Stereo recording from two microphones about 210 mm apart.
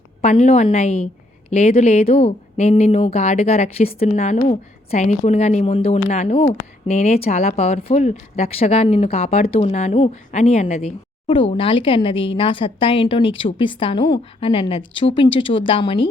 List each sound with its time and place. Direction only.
0.2 s a woman's voice: 30° left (ahead or behind)